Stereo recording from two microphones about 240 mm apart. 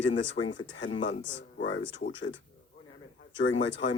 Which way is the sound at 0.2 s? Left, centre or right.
Left.